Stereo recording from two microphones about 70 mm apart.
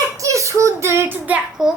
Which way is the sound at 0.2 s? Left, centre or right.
Right.